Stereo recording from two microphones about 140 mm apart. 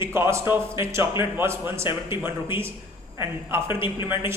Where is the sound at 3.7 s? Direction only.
15° right (ahead or behind).